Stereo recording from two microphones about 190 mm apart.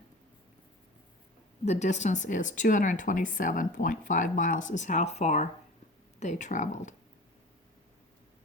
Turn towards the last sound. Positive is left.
turn(degrees=40)  # may be behind; listen again after turning